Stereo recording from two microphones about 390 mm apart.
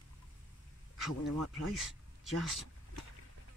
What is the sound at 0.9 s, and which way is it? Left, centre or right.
Speech, centre.